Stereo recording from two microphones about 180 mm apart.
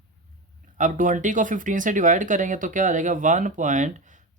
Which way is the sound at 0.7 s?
45° right (ahead or behind).